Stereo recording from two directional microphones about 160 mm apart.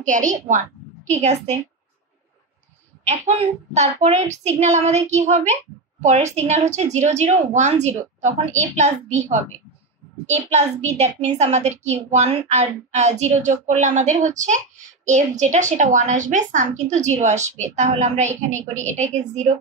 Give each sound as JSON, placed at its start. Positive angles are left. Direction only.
{"t": 0.0, "sound": "a woman's voice", "side_deg": -50}
{"t": 3.0, "sound": "a child's voice", "side_deg": -40}